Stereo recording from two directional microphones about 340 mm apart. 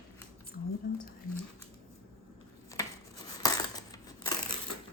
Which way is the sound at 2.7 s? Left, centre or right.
Centre.